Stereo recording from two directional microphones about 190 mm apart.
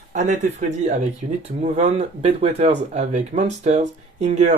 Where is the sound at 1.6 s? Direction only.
35° right (ahead or behind).